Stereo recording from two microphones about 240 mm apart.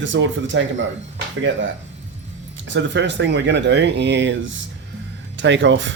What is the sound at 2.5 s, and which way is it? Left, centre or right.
Speech, right.